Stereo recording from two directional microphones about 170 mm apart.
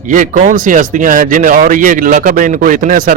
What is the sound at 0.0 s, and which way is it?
Speech, 50° right (ahead or behind).